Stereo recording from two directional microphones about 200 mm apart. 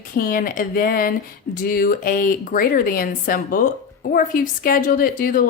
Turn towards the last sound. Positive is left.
turn(degrees=45)  # may be behind; listen again after turning